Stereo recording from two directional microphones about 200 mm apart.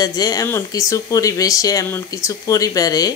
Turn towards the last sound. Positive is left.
turn(degrees=20)  # may be behind; listen again after turning